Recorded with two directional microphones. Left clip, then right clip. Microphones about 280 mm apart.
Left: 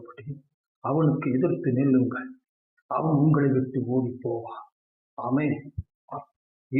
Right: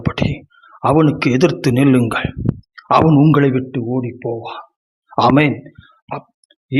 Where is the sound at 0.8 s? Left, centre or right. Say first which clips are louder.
Right 12 dB; right.